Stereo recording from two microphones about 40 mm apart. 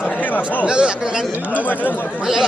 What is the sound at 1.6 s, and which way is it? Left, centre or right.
Speech, left.